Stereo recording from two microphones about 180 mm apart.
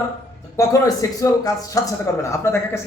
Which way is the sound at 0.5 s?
20° left (ahead or behind).